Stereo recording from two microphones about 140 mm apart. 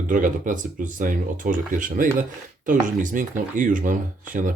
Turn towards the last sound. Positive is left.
turn(degrees=-70)  # may be behind; listen again after turning